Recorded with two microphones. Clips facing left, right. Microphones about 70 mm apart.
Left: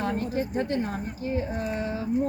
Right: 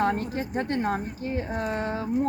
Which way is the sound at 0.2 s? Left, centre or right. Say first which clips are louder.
Left 2 dB; right.